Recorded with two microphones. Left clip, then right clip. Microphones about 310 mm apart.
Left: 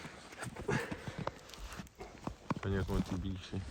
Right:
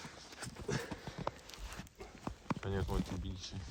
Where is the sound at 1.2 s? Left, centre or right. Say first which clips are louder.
Even; centre.